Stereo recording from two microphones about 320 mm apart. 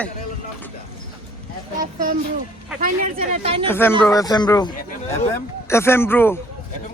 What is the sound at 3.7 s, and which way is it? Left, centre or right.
Speech, centre.